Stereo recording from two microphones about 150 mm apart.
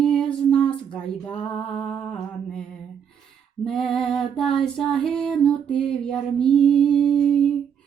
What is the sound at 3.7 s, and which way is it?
Female singing, centre (ahead or behind).